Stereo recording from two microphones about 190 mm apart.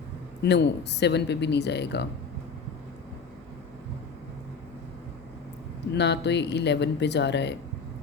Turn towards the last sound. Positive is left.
turn(degrees=65)  # may be behind; listen again after turning